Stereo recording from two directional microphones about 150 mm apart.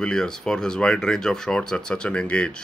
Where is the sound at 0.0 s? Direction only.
5° left (ahead or behind).